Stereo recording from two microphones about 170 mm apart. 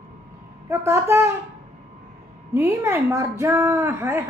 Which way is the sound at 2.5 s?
15° right (ahead or behind).